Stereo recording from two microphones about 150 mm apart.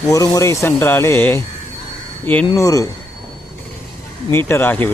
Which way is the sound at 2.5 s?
20° left (ahead or behind).